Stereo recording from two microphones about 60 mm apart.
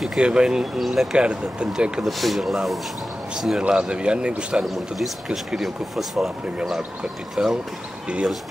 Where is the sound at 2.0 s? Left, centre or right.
Centre.